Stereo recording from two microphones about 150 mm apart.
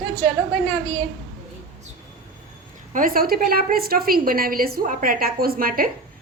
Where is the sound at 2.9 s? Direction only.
70° right (ahead or behind).